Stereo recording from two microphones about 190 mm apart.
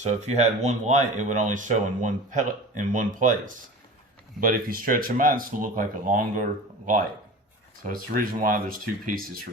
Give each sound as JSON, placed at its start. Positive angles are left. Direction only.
{"t": 0.2, "sound": "speech", "side_deg": -35}